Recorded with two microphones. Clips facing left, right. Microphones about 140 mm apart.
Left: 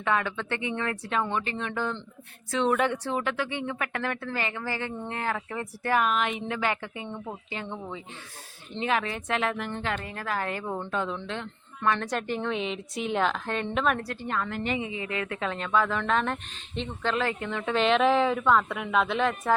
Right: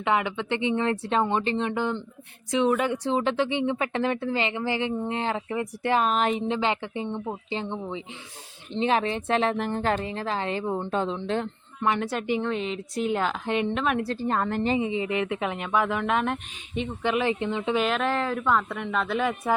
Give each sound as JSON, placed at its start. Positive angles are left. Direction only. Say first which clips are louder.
{"t": 0.0, "sound": "a woman's voice", "louder": "right 2 dB", "side_deg": -15}
{"t": 6.5, "sound": "a woman's voice", "louder": "right 3 dB", "side_deg": -20}
{"t": 10.0, "sound": "speech", "louder": "right 3 dB", "side_deg": -25}
{"t": 10.9, "sound": "a woman's voice", "louder": "right 2 dB", "side_deg": -30}
{"t": 11.8, "sound": "a woman's voice", "louder": "right 1 dB", "side_deg": -15}
{"t": 14.0, "sound": "a woman's voice", "louder": "right 5 dB", "side_deg": -30}
{"t": 17.7, "sound": "speech", "louder": "left 6 dB", "side_deg": -5}